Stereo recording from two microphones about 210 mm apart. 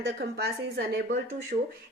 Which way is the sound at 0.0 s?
50° right (ahead or behind).